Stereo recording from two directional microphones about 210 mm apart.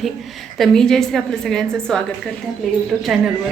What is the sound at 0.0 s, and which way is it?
A woman's voice, centre (ahead or behind).